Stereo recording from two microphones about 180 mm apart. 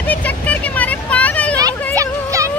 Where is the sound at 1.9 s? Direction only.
15° right (ahead or behind).